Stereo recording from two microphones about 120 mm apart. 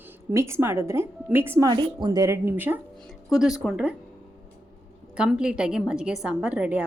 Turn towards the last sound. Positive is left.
turn(degrees=-10)  # may be behind; listen again after turning